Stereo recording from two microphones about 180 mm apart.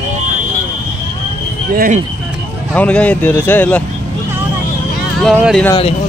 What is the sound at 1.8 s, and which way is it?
Speech, 45° right (ahead or behind).